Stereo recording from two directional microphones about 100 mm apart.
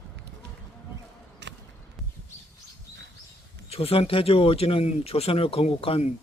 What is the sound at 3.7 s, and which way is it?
Speech, 80° left.